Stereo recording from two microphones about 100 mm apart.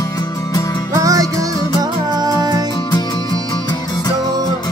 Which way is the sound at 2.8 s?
45° left (ahead or behind).